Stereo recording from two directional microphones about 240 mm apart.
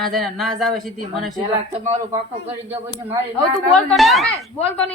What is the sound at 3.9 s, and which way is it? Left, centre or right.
Speech, centre.